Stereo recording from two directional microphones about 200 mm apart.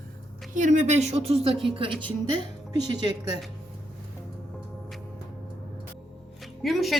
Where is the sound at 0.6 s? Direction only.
35° right (ahead or behind).